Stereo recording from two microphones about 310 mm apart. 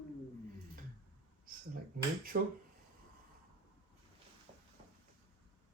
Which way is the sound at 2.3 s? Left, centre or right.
Right.